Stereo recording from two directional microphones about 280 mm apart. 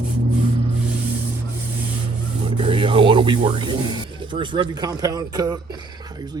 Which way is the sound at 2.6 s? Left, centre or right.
Centre.